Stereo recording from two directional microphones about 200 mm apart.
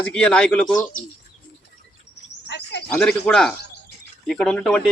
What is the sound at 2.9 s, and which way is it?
Speech, 5° left (ahead or behind).